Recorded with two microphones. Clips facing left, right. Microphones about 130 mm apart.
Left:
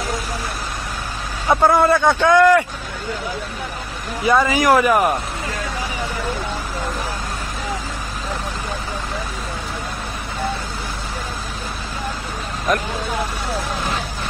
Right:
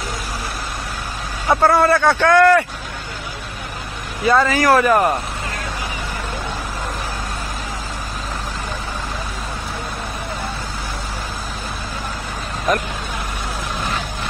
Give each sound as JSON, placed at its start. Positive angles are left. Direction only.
{"t": 1.5, "sound": "a man's voice", "side_deg": 15}
{"t": 4.2, "sound": "a man's voice", "side_deg": 15}